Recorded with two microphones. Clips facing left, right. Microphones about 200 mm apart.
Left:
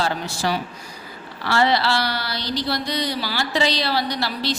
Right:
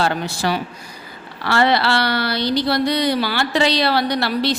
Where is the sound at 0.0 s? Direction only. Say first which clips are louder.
Right 3 dB; 60° right (ahead or behind).